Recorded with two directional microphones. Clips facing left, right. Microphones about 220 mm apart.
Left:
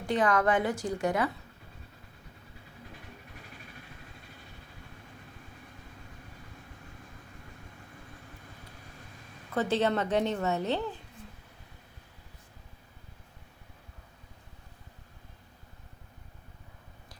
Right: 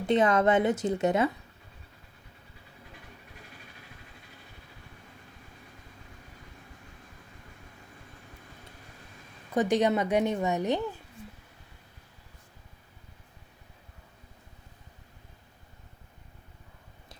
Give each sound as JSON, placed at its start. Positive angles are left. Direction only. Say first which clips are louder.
{"t": 0.0, "sound": "a woman's voice", "louder": "right 3 dB", "side_deg": -20}
{"t": 9.5, "sound": "a woman's voice", "louder": "right 3 dB", "side_deg": -15}